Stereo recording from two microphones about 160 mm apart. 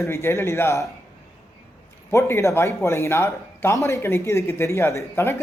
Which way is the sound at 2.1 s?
15° left (ahead or behind).